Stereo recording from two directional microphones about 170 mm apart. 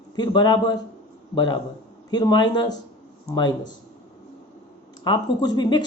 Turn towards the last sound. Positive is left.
turn(degrees=25)  # may be behind; listen again after turning